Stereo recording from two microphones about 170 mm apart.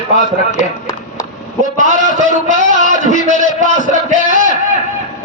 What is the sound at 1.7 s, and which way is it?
A man's voice, 45° right (ahead or behind).